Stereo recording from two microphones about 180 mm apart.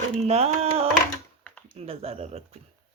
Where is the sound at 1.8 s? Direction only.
35° right (ahead or behind).